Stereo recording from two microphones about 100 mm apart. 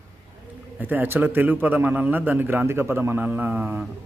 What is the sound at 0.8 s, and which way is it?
A man's voice, 20° right (ahead or behind).